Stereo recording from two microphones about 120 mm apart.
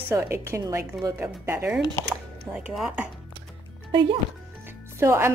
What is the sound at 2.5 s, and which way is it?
Speech, 5° right (ahead or behind).